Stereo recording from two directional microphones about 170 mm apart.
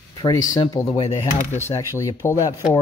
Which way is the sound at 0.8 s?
35° left (ahead or behind).